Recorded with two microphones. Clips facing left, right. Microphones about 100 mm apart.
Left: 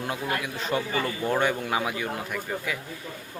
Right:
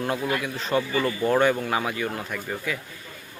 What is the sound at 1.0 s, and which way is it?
Speech, 5° right (ahead or behind).